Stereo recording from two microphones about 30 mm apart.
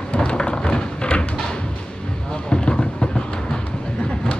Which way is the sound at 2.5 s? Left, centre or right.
Left.